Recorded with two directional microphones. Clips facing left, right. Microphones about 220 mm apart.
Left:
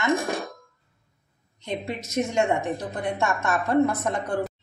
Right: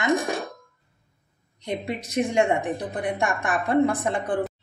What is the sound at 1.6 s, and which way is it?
A woman's voice, 15° right (ahead or behind).